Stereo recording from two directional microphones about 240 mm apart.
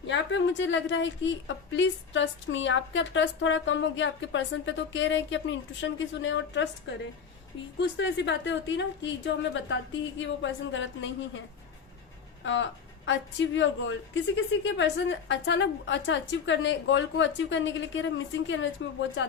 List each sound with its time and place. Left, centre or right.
0.1 s a woman's voice: left
13.6 s a woman's voice: left